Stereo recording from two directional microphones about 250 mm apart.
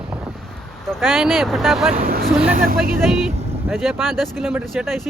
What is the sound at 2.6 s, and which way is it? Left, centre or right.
Speech, right.